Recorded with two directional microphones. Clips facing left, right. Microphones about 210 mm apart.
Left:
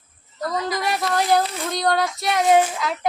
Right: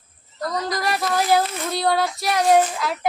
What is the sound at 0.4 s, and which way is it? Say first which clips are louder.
Child singing: even; centre (ahead or behind).